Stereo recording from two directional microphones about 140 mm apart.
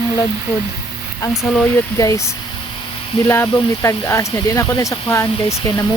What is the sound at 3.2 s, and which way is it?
Speech, 20° left (ahead or behind).